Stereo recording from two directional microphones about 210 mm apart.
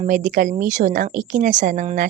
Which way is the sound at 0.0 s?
40° right (ahead or behind).